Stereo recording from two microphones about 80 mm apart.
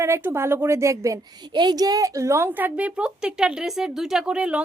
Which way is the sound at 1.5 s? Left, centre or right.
Right.